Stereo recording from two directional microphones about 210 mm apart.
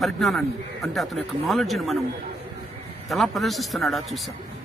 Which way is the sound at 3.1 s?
Centre (ahead or behind).